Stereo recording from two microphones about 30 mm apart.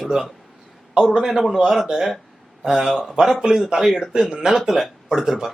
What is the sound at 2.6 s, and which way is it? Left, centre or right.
Speech, centre.